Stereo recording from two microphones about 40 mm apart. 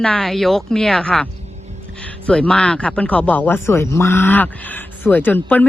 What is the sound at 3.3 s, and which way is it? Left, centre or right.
Speech, left.